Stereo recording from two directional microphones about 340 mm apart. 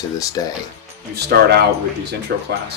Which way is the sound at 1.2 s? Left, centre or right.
Right.